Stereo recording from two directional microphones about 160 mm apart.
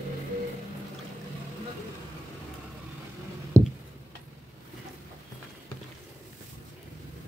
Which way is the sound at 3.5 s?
15° right (ahead or behind).